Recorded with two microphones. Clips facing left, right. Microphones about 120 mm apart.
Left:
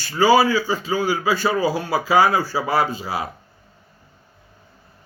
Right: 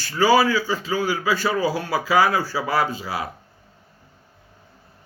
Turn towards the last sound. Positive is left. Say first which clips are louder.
# left 2 dB
turn(degrees=25)  # may be behind; listen again after turning